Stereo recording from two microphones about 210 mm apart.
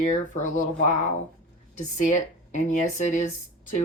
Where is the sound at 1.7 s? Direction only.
35° left (ahead or behind).